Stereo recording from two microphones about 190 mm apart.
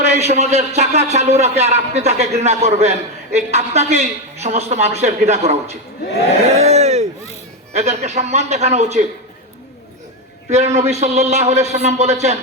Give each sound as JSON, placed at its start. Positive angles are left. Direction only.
{"t": 0.0, "sound": "a man's voice", "side_deg": -35}
{"t": 6.6, "sound": "a sound", "side_deg": -35}
{"t": 7.7, "sound": "a man's voice", "side_deg": -35}
{"t": 10.5, "sound": "a man's voice", "side_deg": -35}